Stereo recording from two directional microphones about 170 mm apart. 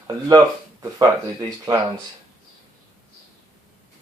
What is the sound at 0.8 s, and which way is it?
Speech, 20° right (ahead or behind).